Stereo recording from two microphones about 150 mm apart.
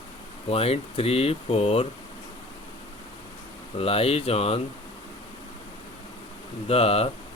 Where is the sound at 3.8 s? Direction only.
40° left (ahead or behind).